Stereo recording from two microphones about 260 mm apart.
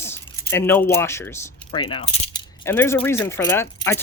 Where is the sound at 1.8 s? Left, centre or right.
Left.